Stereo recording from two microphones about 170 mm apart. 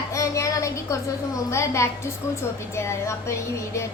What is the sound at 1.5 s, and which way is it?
A woman's voice, 15° left (ahead or behind).